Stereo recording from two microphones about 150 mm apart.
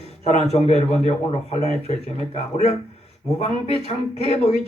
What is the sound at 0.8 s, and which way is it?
A man's voice, 45° left (ahead or behind).